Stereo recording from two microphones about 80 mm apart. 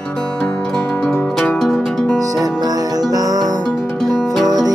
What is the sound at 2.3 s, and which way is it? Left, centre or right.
Music, right.